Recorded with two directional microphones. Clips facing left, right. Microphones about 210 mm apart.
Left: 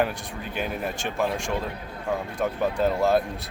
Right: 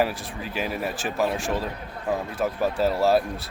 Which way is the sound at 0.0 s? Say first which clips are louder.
Right 1 dB; centre (ahead or behind).